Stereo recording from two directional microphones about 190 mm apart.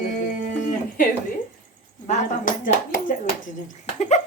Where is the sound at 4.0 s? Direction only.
35° left (ahead or behind).